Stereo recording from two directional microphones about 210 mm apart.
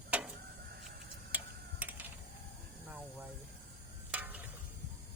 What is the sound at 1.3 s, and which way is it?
Tick-tock, 10° right (ahead or behind).